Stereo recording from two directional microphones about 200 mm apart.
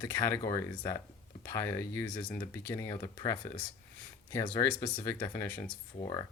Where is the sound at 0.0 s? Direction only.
15° left (ahead or behind).